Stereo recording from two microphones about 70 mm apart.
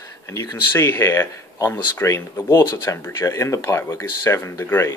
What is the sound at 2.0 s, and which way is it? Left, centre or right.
Speech, left.